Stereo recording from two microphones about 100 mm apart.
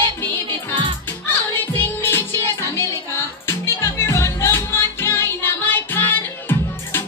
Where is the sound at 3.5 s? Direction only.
25° left (ahead or behind).